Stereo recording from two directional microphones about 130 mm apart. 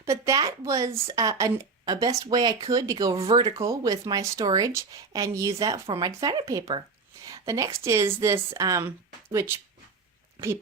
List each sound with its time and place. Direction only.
0.0 s speech: 25° right (ahead or behind)